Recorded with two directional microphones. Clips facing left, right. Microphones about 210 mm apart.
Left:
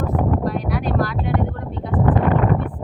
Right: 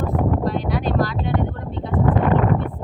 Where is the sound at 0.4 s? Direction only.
30° right (ahead or behind).